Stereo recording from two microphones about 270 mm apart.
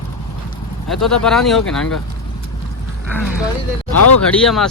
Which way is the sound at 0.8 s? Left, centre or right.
Centre.